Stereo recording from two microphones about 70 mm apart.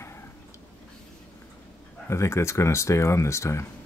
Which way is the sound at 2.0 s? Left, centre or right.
Left.